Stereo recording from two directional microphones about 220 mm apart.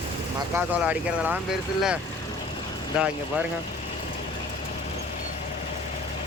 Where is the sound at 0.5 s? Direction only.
5° right (ahead or behind).